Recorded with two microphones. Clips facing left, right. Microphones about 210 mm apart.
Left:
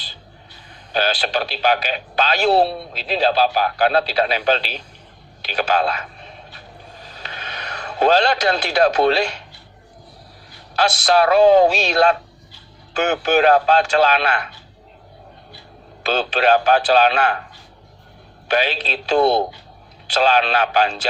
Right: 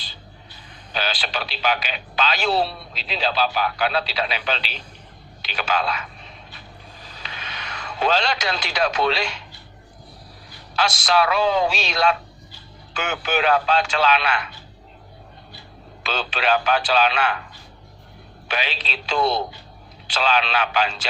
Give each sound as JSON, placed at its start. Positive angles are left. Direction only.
{"t": 0.9, "sound": "speech", "side_deg": 40}
{"t": 7.3, "sound": "speech", "side_deg": 40}
{"t": 11.0, "sound": "speech", "side_deg": 40}
{"t": 16.1, "sound": "speech", "side_deg": 45}
{"t": 18.5, "sound": "speech", "side_deg": 45}
{"t": 20.2, "sound": "speech", "side_deg": 40}